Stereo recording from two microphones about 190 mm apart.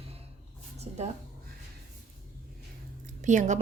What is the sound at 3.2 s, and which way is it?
Speech, 40° right (ahead or behind).